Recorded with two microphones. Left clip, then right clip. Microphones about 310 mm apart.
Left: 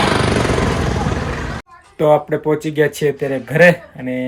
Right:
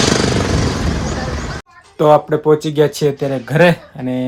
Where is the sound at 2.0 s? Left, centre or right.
Centre.